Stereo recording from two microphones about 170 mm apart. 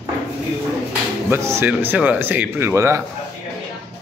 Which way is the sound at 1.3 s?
15° right (ahead or behind).